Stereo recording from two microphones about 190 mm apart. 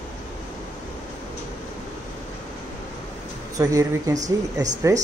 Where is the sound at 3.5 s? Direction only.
15° right (ahead or behind).